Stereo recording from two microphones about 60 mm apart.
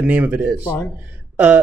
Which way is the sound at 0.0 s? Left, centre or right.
Right.